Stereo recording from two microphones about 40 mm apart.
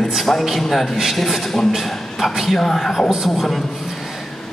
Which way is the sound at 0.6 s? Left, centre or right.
Centre.